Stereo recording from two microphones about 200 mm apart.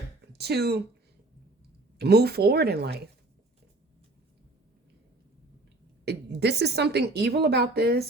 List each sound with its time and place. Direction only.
0.3 s a woman's voice: 55° right (ahead or behind)
2.0 s a woman's voice: 50° right (ahead or behind)
6.1 s a woman's voice: 55° right (ahead or behind)